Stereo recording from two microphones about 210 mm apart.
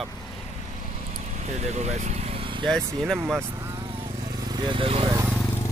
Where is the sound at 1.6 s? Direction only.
30° right (ahead or behind).